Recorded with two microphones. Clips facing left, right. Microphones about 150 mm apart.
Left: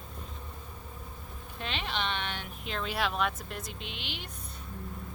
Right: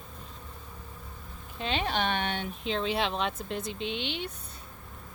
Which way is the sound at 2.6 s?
25° right (ahead or behind).